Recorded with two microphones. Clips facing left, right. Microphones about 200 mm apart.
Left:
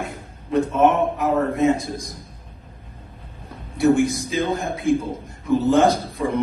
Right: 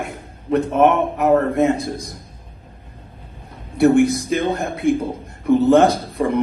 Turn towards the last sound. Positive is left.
turn(degrees=-60)  # may be behind; listen again after turning